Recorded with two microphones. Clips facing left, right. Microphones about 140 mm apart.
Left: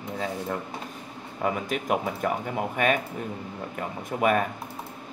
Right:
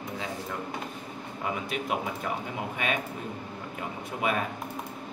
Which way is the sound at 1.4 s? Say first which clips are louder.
Left 5 dB; 50° left (ahead or behind).